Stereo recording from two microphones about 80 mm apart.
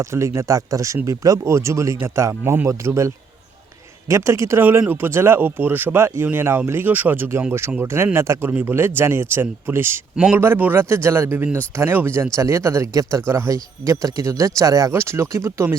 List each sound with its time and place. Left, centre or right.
0.0 s speech: right
4.1 s speech: right
8.4 s speech: right